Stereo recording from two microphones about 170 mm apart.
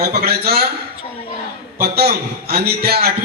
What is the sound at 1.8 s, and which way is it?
A man's voice, 70° right (ahead or behind).